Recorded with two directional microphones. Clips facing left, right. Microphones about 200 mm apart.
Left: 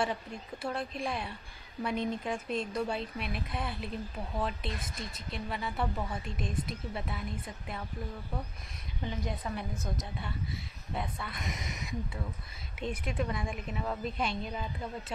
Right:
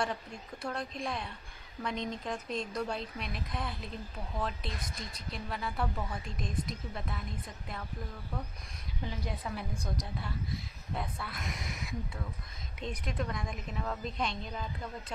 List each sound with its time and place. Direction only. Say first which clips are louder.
0.0 s speech: left 2 dB; 5° left (ahead or behind)
9.0 s speech: left 2 dB; centre (ahead or behind)